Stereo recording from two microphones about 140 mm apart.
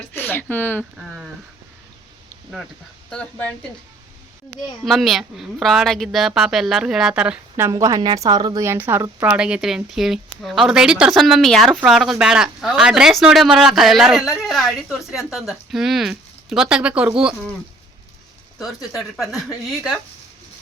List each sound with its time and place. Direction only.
0.1 s speech: 15° left (ahead or behind)
3.1 s speech: 10° left (ahead or behind)
4.9 s speech: centre (ahead or behind)
7.7 s a woman's voice: 25° right (ahead or behind)
8.6 s speech: 15° right (ahead or behind)
18.6 s speech: centre (ahead or behind)